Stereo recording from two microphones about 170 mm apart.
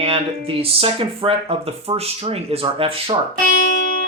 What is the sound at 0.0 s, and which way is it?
Speech, 35° right (ahead or behind).